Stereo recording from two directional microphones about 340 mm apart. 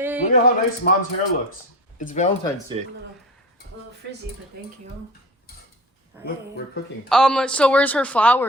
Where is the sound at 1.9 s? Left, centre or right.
Left.